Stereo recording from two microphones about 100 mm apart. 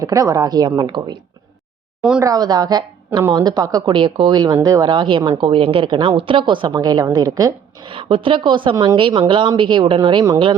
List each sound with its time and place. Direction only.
0.0 s a woman's voice: 35° right (ahead or behind); by 1.2 s 55° right (ahead or behind)
2.0 s speech: 10° right (ahead or behind)
2.2 s a woman's voice: 40° right (ahead or behind)
3.8 s a woman's voice: 55° right (ahead or behind)
6.7 s a woman's voice: 40° right (ahead or behind)
7.9 s a woman's voice: 65° right (ahead or behind)